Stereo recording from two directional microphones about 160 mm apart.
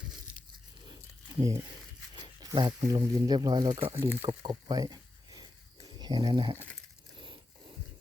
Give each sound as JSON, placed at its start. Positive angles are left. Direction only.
{"t": 1.4, "sound": "speech", "side_deg": -20}
{"t": 4.3, "sound": "a sound", "side_deg": -25}
{"t": 6.0, "sound": "speech", "side_deg": -25}